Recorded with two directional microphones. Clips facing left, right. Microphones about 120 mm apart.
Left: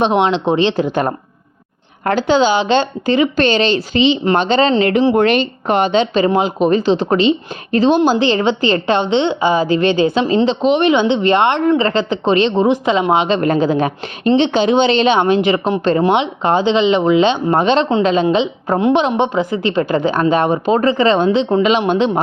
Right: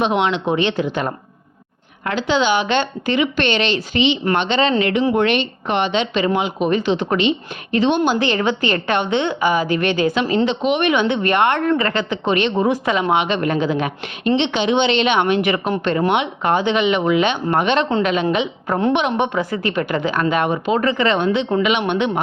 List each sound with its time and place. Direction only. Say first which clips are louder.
0.0 s speech: left 4 dB; 30° left (ahead or behind)
2.0 s speech: left 5 dB; 45° left (ahead or behind)